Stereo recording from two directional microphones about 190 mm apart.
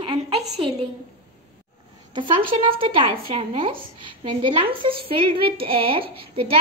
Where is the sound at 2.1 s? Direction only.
25° right (ahead or behind).